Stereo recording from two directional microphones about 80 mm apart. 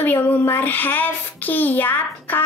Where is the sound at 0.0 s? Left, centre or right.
Left.